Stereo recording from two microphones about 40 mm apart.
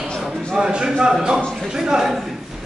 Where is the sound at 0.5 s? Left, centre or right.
Centre.